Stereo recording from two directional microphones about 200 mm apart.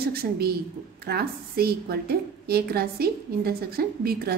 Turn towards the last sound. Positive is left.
turn(degrees=-50)  # may be behind; listen again after turning